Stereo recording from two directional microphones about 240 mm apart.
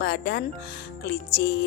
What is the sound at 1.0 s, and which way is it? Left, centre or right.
Music, left.